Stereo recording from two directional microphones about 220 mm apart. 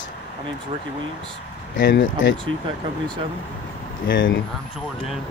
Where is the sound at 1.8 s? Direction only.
55° left (ahead or behind).